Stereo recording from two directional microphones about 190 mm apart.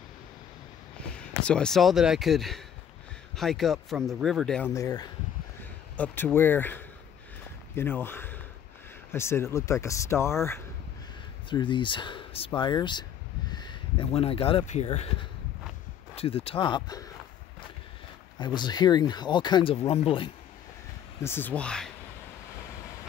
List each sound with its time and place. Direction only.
1.4 s speech: 5° left (ahead or behind)
11.5 s speech: 25° left (ahead or behind)
13.5 s a sound: 25° left (ahead or behind)
14.7 s speech: 35° left (ahead or behind)
18.4 s speech: 25° left (ahead or behind)
21.2 s speech: 10° left (ahead or behind)